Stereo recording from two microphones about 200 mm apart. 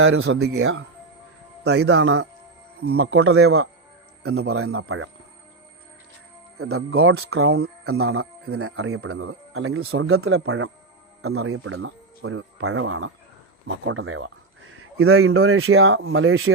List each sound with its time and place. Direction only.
0.0 s speech: 90° right
1.6 s speech: 55° right (ahead or behind)
3.0 s speech: 90° right
6.6 s speech: 90° right; by 13.1 s 75° right (ahead or behind)
13.8 s speech: 85° right